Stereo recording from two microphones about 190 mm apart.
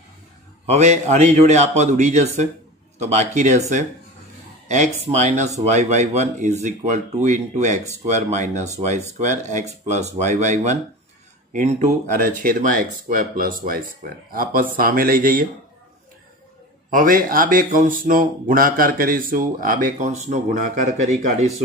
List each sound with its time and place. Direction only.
0.7 s speech: 35° right (ahead or behind)
16.9 s speech: 45° right (ahead or behind)